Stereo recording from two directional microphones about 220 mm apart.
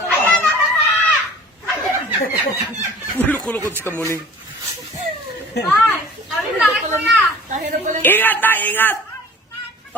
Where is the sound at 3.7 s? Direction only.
10° right (ahead or behind).